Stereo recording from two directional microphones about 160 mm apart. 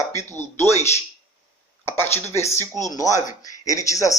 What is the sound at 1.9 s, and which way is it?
Speech, 15° left (ahead or behind).